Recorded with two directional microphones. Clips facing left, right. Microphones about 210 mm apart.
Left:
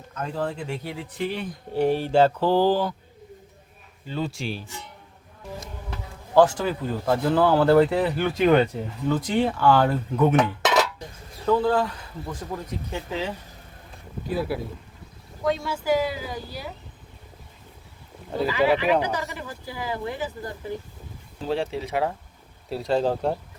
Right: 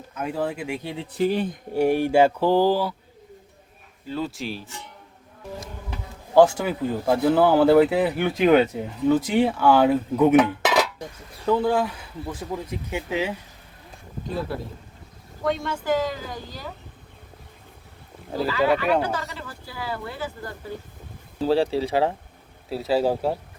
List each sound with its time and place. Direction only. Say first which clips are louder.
0.1 s speech: right 2 dB; 10° right (ahead or behind)
1.2 s speech: right 7 dB; 40° right (ahead or behind)
1.7 s speech: right 2 dB; 10° right (ahead or behind)
4.0 s speech: even; centre (ahead or behind)
5.9 s speech: right 1 dB; 10° right (ahead or behind)
14.3 s speech: left 2 dB; 5° left (ahead or behind)
19.0 s speech: even; 15° left (ahead or behind)
21.4 s speech: right 6 dB; 35° right (ahead or behind)
22.7 s speech: right 1 dB; 5° right (ahead or behind)